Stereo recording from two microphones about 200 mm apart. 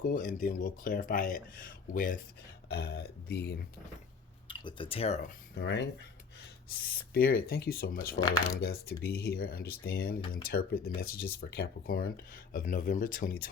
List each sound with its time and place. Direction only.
0.0 s speech: 40° left (ahead or behind)
2.6 s speech: 55° left (ahead or behind)
4.4 s speech: 25° left (ahead or behind)
5.6 s speech: 60° left (ahead or behind)
6.7 s speech: 50° left (ahead or behind)